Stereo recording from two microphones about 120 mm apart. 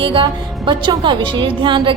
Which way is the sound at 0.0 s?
45° right (ahead or behind).